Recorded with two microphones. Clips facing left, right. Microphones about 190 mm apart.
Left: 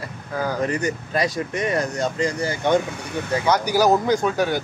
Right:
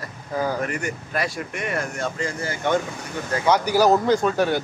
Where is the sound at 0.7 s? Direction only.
20° left (ahead or behind).